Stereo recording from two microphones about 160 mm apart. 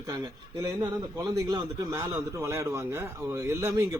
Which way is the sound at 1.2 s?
20° right (ahead or behind).